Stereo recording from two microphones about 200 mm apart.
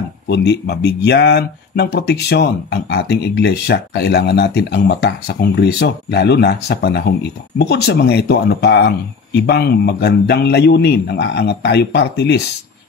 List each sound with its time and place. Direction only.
0.3 s speech: 55° left (ahead or behind)